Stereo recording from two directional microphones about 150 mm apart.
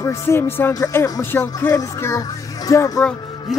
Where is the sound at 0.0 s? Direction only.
20° left (ahead or behind).